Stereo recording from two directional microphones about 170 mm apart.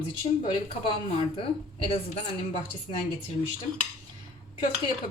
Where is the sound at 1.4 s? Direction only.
30° left (ahead or behind).